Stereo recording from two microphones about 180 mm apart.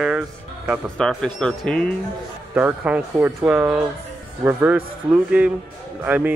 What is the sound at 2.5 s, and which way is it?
Speech, 10° right (ahead or behind).